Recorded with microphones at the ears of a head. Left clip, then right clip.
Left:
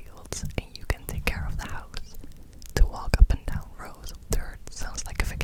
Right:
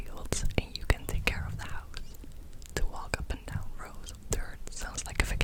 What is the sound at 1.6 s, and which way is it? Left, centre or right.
Whispering, left.